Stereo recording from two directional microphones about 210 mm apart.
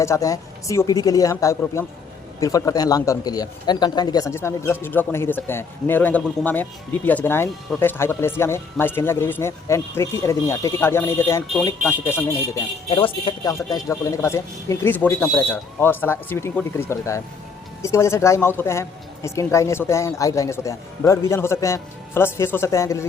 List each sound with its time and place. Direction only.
0.0 s speech: 15° left (ahead or behind)
12.9 s speech: 25° left (ahead or behind)